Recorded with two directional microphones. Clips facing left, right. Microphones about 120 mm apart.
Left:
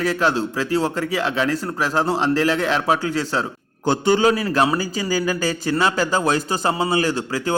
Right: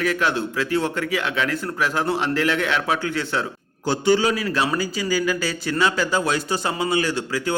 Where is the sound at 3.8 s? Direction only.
50° left (ahead or behind).